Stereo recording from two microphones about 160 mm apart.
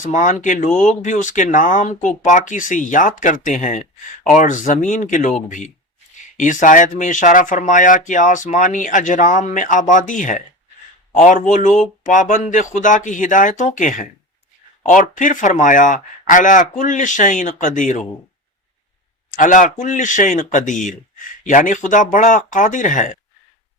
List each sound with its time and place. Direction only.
0.0 s speech: 50° left (ahead or behind)
19.3 s speech: 55° left (ahead or behind)